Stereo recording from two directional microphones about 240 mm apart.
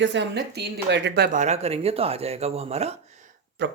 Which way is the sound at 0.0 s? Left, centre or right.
Right.